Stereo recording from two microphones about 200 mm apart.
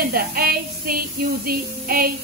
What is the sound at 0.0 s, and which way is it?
Speech, 45° right (ahead or behind).